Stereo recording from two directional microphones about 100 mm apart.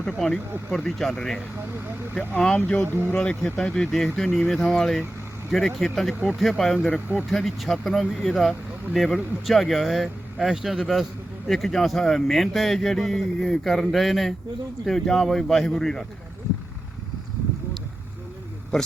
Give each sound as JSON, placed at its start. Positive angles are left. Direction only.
{"t": 0.2, "sound": "speech", "side_deg": 10}
{"t": 2.6, "sound": "speech", "side_deg": 15}
{"t": 7.3, "sound": "speech", "side_deg": 0}